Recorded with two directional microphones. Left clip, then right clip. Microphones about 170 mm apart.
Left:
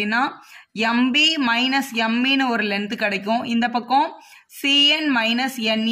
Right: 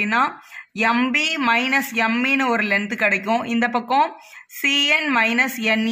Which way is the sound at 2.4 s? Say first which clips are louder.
Right 2 dB; 20° right (ahead or behind).